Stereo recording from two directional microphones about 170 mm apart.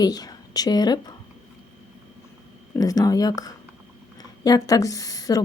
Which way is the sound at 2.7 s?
20° left (ahead or behind).